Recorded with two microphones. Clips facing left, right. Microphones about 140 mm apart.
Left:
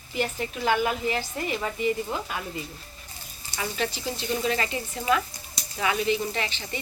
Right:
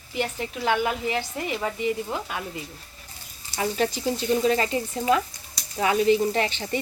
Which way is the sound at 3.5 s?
40° right (ahead or behind).